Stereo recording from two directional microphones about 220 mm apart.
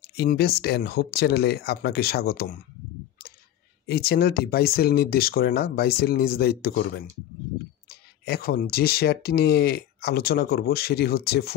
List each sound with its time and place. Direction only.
0.1 s speech: 45° left (ahead or behind)
3.8 s speech: 45° left (ahead or behind)